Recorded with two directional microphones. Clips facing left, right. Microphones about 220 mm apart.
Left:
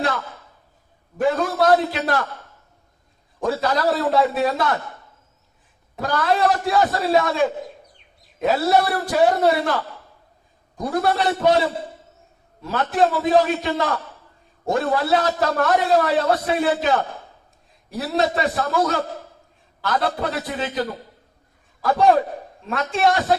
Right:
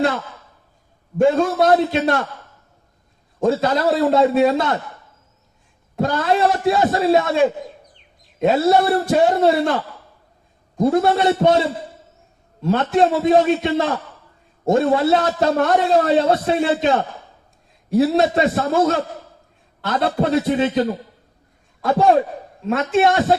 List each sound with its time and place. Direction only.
1.2 s a man's voice: 25° right (ahead or behind)
3.4 s a man's voice: 25° right (ahead or behind)
6.0 s a man's voice: 25° right (ahead or behind)
8.4 s a man's voice: 25° right (ahead or behind)
12.6 s a man's voice: 25° right (ahead or behind)
21.8 s a man's voice: 25° right (ahead or behind)